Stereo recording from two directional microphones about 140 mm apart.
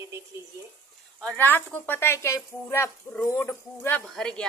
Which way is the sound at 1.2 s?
10° left (ahead or behind).